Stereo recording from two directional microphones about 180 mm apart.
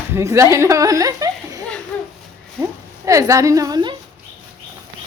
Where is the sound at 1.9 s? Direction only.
5° left (ahead or behind).